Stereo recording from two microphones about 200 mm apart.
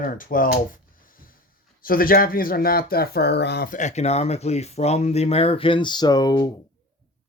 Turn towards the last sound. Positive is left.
turn(degrees=20)  # may be behind; listen again after turning